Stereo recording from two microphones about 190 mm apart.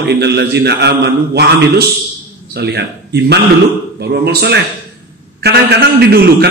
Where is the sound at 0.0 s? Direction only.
60° right (ahead or behind).